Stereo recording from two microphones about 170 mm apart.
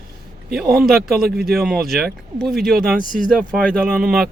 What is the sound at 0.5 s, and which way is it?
A man's voice, 5° right (ahead or behind).